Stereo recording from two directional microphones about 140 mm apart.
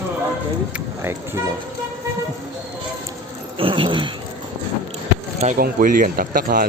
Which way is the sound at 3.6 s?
35° right (ahead or behind).